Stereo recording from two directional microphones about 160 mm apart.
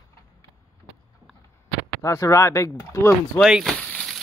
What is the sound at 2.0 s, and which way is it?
Speech, 20° left (ahead or behind).